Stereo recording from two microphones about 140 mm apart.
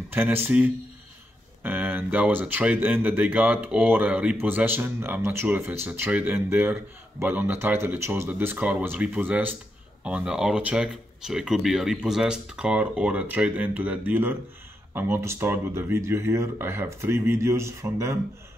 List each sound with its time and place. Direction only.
0.1 s speech: 15° right (ahead or behind)